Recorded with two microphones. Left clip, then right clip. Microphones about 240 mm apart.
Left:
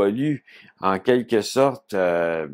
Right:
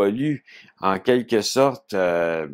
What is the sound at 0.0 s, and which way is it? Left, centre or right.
Speech, right.